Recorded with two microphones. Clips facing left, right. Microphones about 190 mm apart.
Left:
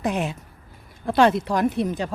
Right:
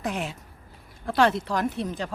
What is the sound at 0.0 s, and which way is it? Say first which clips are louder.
Speech: left 5 dB; 20° left (ahead or behind).